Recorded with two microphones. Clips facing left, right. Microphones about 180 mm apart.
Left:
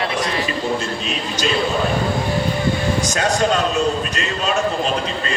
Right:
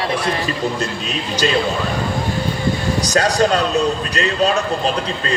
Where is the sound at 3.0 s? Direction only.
35° right (ahead or behind).